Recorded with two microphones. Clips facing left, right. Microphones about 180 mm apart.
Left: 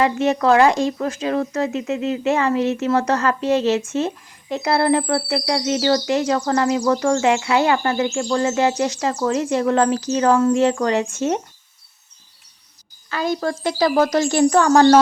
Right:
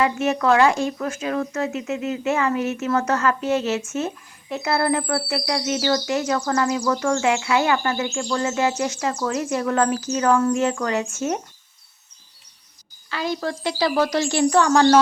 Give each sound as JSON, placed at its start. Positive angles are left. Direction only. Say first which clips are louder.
{"t": 0.0, "sound": "speech", "louder": "left 3 dB", "side_deg": 35}
{"t": 13.1, "sound": "a woman's voice", "louder": "left 4 dB", "side_deg": 45}